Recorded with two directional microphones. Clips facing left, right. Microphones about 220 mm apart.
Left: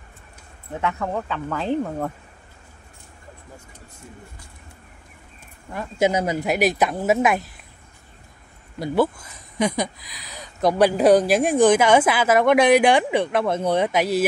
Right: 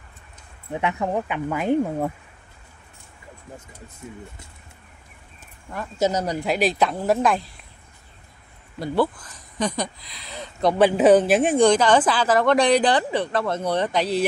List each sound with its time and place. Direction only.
0.7 s speech: 15° right (ahead or behind)
5.7 s speech: 10° left (ahead or behind)
6.7 s speech: 20° left (ahead or behind)
7.0 s speech: 5° left (ahead or behind)
8.7 s speech: 15° left (ahead or behind); by 11.1 s centre (ahead or behind)
11.1 s speech: 10° left (ahead or behind)